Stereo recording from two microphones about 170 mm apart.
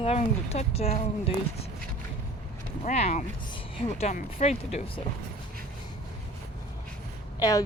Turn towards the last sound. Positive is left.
turn(degrees=20)  # may be behind; listen again after turning